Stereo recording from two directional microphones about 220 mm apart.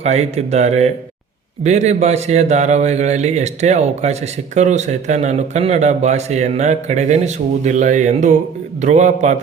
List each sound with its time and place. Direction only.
0.0 s a man's voice: 30° right (ahead or behind)